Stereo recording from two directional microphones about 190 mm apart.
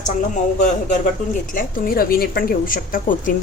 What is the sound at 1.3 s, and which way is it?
A woman's voice, 45° left (ahead or behind).